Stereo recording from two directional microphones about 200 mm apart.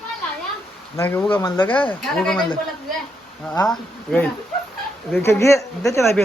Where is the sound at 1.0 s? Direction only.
10° left (ahead or behind).